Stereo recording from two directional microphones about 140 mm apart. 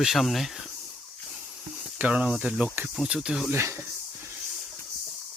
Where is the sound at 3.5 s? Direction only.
20° right (ahead or behind).